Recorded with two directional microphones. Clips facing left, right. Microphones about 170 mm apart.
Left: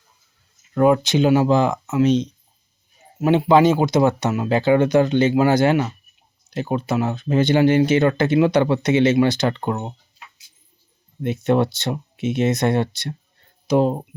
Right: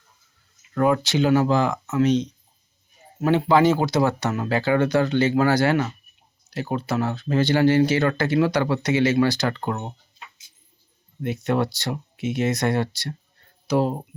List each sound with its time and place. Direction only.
0.7 s speech: 20° left (ahead or behind)
11.2 s speech: 25° left (ahead or behind)